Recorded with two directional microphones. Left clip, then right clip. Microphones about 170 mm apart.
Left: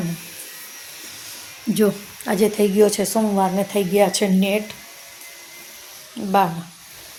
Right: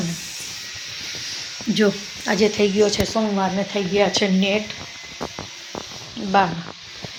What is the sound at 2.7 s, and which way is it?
A woman's voice, 35° left (ahead or behind).